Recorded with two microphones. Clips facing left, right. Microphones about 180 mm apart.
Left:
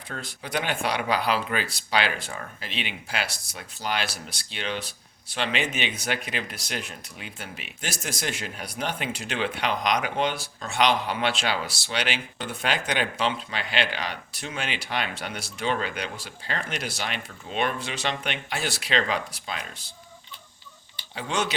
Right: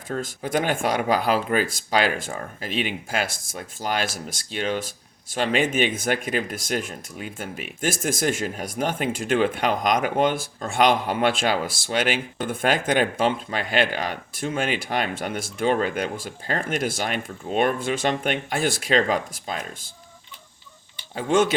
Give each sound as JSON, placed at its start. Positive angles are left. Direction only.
{"t": 0.1, "sound": "speech", "side_deg": -45}
{"t": 21.2, "sound": "speech", "side_deg": -50}